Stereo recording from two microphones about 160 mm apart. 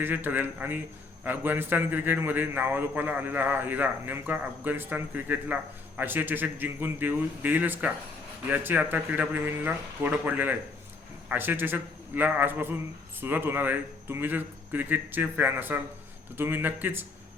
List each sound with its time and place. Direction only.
0.0 s a man's voice: 10° right (ahead or behind)